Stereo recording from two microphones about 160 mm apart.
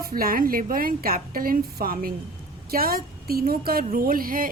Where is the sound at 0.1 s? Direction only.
65° right (ahead or behind).